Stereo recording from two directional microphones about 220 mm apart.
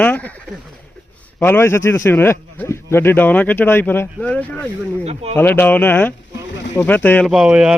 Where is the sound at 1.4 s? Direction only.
10° left (ahead or behind).